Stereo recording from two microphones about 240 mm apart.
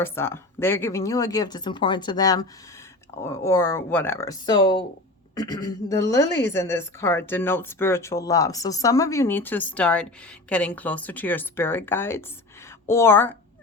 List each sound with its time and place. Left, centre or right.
0.0 s a woman's voice: centre